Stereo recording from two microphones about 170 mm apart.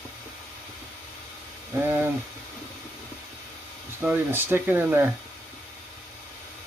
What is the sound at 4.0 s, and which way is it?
Speech, 10° right (ahead or behind).